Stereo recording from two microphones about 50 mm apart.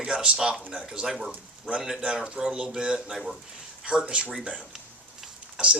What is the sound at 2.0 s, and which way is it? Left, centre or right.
Speech, centre.